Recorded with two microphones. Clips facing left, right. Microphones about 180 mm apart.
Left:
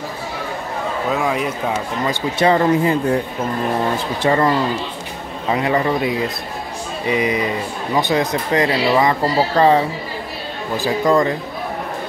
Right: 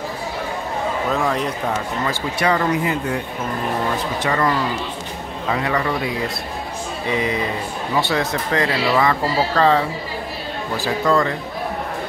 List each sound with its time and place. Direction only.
1.1 s speech: 5° left (ahead or behind)
2.0 s speech: 25° left (ahead or behind)
4.2 s speech: 30° left (ahead or behind)